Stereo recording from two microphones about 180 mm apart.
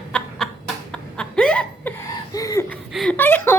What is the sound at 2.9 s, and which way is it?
Speech, 5° left (ahead or behind).